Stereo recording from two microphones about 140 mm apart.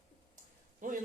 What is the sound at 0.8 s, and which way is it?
Speech, 70° right (ahead or behind).